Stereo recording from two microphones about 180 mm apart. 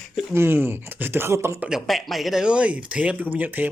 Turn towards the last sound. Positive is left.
turn(degrees=-10)  # may be behind; listen again after turning